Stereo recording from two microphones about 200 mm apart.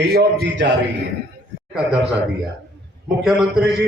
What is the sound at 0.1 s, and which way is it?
Speech, 55° right (ahead or behind).